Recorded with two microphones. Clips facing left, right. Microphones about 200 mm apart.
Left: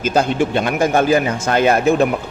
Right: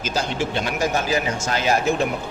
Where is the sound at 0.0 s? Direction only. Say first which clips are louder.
Left 8 dB; 55° left (ahead or behind).